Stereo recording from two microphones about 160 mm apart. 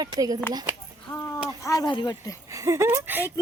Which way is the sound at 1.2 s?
15° left (ahead or behind).